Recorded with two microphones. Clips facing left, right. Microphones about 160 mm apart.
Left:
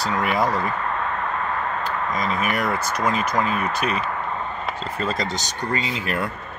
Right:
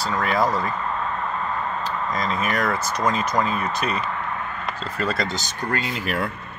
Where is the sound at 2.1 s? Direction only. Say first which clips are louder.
Even; 5° left (ahead or behind).